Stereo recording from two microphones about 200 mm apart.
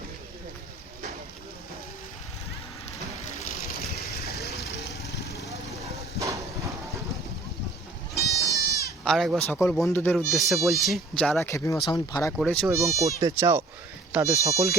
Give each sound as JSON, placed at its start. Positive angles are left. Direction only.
{"t": 4.0, "sound": "vehicle", "side_deg": 50}
{"t": 6.1, "sound": "a sound", "side_deg": -15}
{"t": 8.1, "sound": "goat", "side_deg": 50}
{"t": 8.5, "sound": "sheep", "side_deg": 50}
{"t": 9.0, "sound": "speech", "side_deg": 0}
{"t": 11.4, "sound": "speech", "side_deg": 15}
{"t": 12.4, "sound": "speech", "side_deg": 0}
{"t": 12.6, "sound": "speech", "side_deg": -15}